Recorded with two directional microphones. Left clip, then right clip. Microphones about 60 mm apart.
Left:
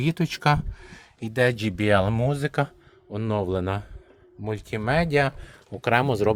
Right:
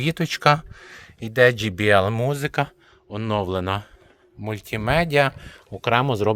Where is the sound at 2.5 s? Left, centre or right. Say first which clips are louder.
Right 2 dB; left.